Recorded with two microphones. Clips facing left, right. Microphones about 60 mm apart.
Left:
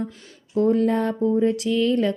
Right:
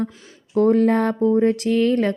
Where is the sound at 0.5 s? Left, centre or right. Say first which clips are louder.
Right 3 dB; right.